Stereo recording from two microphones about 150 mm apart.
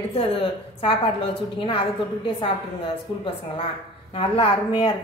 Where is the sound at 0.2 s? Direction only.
40° left (ahead or behind).